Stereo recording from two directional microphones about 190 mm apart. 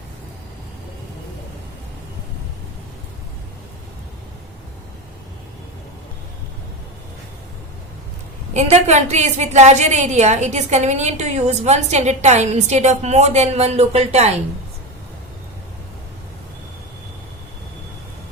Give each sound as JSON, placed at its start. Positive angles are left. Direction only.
{"t": 8.5, "sound": "a woman's voice", "side_deg": -35}